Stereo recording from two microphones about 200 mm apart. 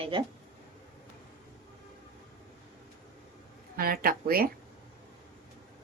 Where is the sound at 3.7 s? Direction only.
50° right (ahead or behind).